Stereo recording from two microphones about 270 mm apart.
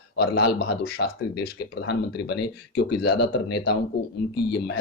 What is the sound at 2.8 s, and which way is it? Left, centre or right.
Speech, left.